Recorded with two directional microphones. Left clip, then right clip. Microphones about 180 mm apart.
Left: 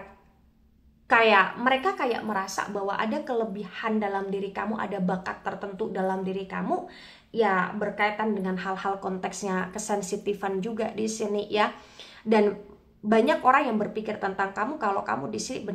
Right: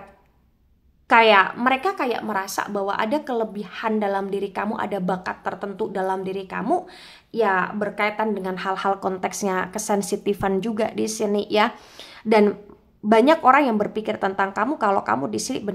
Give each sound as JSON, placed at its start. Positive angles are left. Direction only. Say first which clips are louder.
{"t": 1.0, "sound": "a woman's voice", "louder": "right 5 dB", "side_deg": -35}